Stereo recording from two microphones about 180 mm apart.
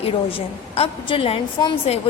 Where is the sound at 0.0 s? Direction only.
30° left (ahead or behind).